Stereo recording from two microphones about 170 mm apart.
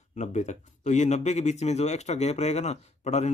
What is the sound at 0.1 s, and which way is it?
Speech, 45° left (ahead or behind).